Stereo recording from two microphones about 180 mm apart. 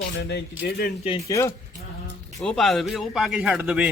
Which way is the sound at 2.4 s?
Centre (ahead or behind).